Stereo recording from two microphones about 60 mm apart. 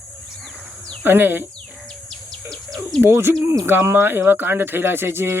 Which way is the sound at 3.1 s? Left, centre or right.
Right.